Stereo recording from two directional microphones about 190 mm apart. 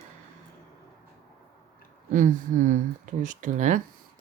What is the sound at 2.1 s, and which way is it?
Speech, 45° right (ahead or behind).